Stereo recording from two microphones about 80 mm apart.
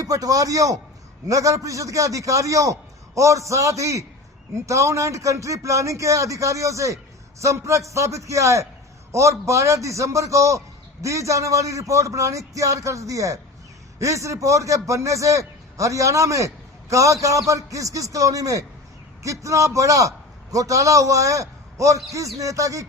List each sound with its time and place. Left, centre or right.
0.0 s a man's voice: right